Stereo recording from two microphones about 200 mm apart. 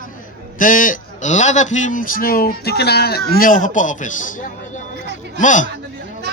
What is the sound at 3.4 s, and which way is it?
A man's voice, 40° left (ahead or behind).